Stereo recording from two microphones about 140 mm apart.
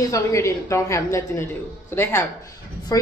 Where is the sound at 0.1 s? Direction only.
20° left (ahead or behind).